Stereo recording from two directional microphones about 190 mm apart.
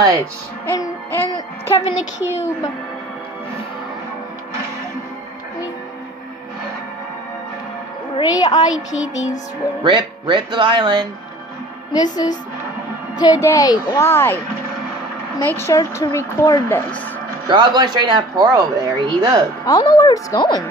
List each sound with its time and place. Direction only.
0.7 s speech: 10° left (ahead or behind)
1.7 s speech: 30° left (ahead or behind)
8.2 s speech: 20° left (ahead or behind)
9.8 s speech: 25° right (ahead or behind)
11.9 s speech: 20° left (ahead or behind)
17.5 s speech: 25° right (ahead or behind)
19.6 s speech: 20° left (ahead or behind)